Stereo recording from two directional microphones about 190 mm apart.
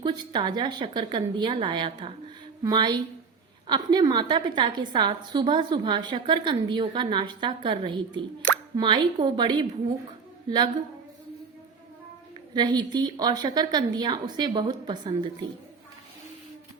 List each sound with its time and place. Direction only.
0.0 s a woman's voice: 20° right (ahead or behind)
12.5 s a woman's voice: 20° right (ahead or behind)